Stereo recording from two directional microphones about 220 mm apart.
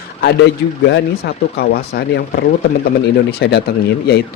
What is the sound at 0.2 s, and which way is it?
Speech, 50° left (ahead or behind).